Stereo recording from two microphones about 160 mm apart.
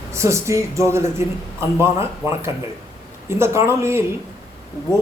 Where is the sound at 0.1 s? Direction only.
15° right (ahead or behind).